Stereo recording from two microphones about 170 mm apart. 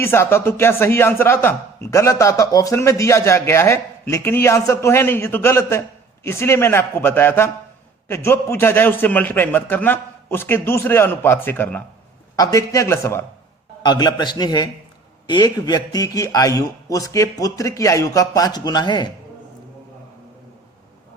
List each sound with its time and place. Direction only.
0.0 s a man's voice: 15° left (ahead or behind)